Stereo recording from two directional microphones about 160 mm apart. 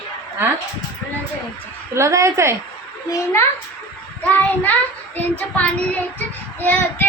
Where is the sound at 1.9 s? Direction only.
20° right (ahead or behind).